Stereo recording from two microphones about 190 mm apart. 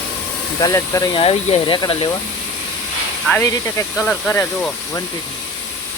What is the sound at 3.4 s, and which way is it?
Speech, 15° left (ahead or behind).